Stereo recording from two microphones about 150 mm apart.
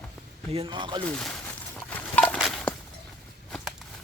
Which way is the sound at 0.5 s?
35° right (ahead or behind).